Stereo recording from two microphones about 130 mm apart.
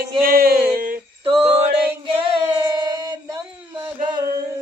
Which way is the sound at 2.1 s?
35° right (ahead or behind).